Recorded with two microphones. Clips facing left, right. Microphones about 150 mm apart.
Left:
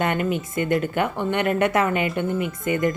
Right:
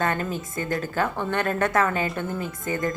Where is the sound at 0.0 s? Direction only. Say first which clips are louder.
Left 3 dB; 20° left (ahead or behind).